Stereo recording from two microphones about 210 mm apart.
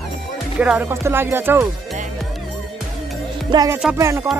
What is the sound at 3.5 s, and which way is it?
Speech, 20° right (ahead or behind).